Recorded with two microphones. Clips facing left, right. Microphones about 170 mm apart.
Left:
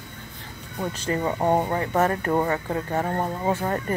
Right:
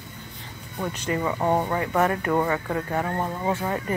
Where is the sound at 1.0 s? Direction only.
30° left (ahead or behind).